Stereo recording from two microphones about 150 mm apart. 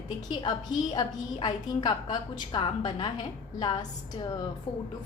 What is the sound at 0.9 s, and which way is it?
A woman's voice, 30° left (ahead or behind).